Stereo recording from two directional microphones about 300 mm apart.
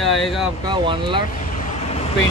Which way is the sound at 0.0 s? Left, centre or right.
Centre.